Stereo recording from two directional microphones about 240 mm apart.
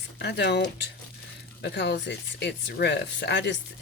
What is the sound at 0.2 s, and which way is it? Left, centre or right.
Speech, left.